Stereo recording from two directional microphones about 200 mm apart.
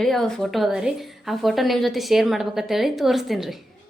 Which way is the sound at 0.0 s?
Centre (ahead or behind).